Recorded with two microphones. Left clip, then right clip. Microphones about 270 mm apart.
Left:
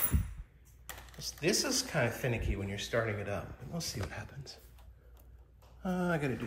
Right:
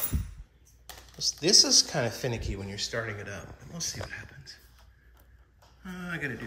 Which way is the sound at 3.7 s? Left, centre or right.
Centre.